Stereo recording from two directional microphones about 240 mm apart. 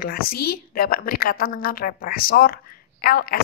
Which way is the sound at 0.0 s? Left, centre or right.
Left.